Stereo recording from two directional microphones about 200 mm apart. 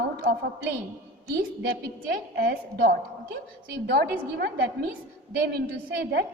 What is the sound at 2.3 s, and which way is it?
A woman's voice, 50° right (ahead or behind).